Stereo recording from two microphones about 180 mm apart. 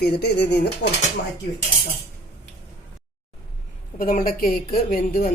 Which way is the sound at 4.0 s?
50° left (ahead or behind).